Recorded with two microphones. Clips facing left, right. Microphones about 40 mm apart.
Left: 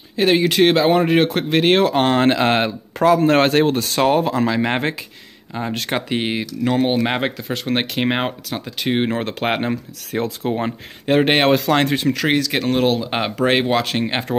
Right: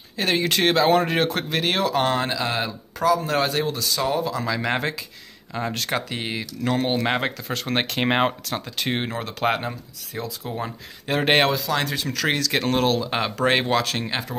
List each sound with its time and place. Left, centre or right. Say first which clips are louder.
0.2 s speech: left 6 dB; centre; by 2.3 s left
2.3 s speech: left 8 dB; left
4.5 s speech: left 4 dB; left
6.6 s speech: left 4 dB; centre
9.1 s speech: left 3 dB; left
10.1 s speech: left 8 dB; left
11.1 s speech: left 8 dB; left
11.5 s speech: left 8 dB; left
11.8 s speech: left 6 dB; left